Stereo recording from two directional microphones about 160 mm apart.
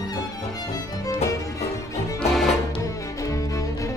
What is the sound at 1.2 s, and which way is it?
Music, 20° left (ahead or behind).